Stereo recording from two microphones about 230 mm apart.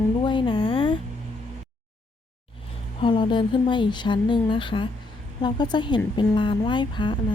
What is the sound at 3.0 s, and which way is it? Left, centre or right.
A woman's voice, left.